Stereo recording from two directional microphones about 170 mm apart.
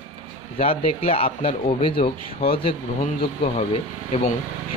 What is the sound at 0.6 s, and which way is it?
Speech, 35° left (ahead or behind).